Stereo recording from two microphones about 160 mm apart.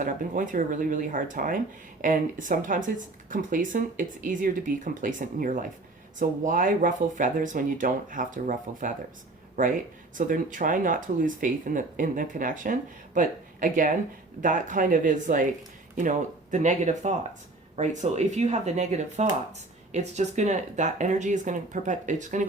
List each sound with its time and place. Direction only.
0.0 s speech: 55° right (ahead or behind)
10.2 s speech: 55° right (ahead or behind)